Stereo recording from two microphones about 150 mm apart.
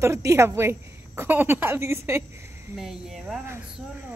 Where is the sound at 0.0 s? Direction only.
20° right (ahead or behind).